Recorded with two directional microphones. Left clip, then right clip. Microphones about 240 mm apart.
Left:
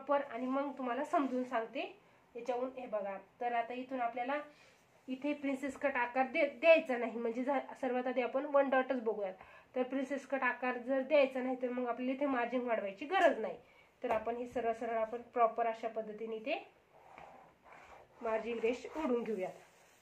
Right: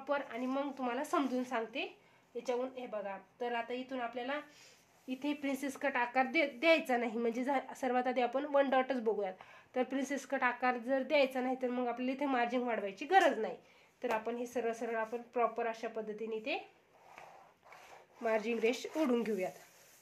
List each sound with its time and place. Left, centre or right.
0.0 s a woman's voice: right
3.3 s a woman's voice: right
18.2 s a woman's voice: right